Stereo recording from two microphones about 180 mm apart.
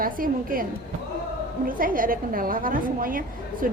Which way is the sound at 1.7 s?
50° right (ahead or behind).